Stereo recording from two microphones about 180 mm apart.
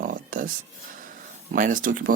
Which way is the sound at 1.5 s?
45° right (ahead or behind).